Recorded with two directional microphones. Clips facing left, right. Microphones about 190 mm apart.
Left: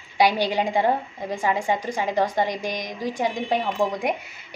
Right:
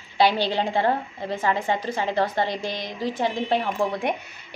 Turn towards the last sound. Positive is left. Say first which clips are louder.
# left 1 dB
turn(degrees=15)  # may be behind; listen again after turning